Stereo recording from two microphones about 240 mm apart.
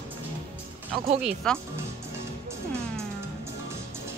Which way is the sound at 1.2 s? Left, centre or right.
Centre.